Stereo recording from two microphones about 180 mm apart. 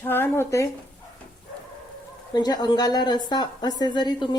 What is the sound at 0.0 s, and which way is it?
Speech, 10° left (ahead or behind).